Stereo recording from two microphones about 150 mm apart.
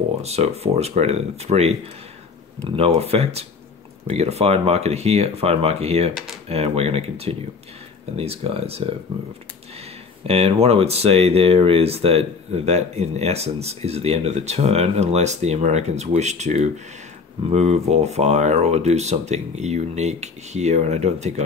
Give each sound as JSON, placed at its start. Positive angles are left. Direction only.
{"t": 0.2, "sound": "speech", "side_deg": -45}
{"t": 10.2, "sound": "speech", "side_deg": -45}